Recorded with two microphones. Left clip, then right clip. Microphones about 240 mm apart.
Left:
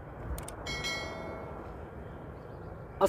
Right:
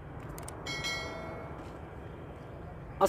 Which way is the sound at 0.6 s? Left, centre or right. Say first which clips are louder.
Even; centre.